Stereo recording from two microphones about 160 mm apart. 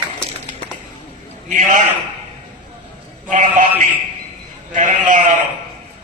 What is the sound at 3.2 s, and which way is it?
Speech, 50° right (ahead or behind).